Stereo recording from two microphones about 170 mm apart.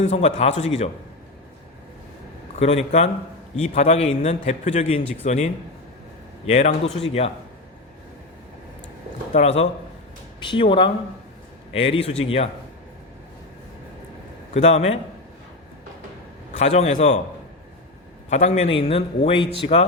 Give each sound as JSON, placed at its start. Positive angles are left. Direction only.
{"t": 0.0, "sound": "a man's voice", "side_deg": 40}
{"t": 2.6, "sound": "a man's voice", "side_deg": 40}
{"t": 9.3, "sound": "a man's voice", "side_deg": 40}
{"t": 14.5, "sound": "a man's voice", "side_deg": 40}
{"t": 16.6, "sound": "a man's voice", "side_deg": 40}
{"t": 18.3, "sound": "a man's voice", "side_deg": 40}